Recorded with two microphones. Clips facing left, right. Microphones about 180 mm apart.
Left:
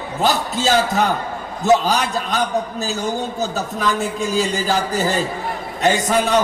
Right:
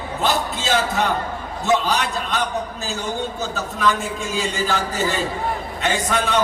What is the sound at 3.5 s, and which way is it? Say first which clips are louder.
A man's voice: even; 40° left (ahead or behind).